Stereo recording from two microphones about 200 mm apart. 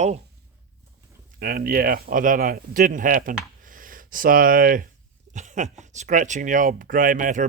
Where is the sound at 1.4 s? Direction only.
45° right (ahead or behind).